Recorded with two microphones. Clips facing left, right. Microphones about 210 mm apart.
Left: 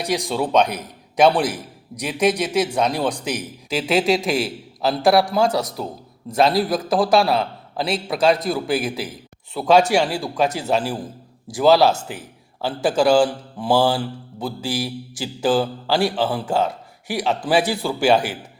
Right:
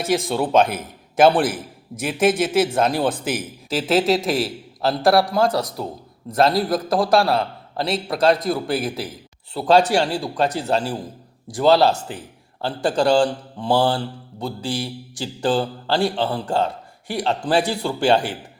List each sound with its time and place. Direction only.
0.0 s a man's voice: centre (ahead or behind)